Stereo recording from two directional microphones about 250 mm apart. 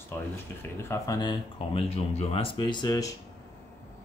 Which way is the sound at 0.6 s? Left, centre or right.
Centre.